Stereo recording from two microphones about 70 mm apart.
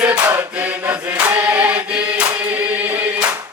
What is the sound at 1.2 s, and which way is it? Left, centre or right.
Choir, centre.